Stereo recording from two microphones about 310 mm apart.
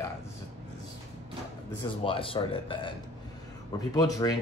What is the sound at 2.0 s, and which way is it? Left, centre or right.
Speech, centre.